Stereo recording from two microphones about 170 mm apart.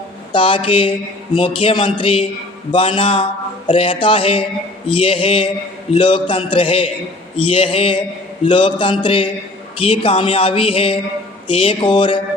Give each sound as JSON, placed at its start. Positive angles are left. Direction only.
{"t": 0.3, "sound": "a man's voice", "side_deg": 30}